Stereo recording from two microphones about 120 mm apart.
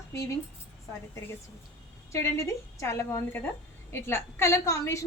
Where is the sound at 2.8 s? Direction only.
25° left (ahead or behind).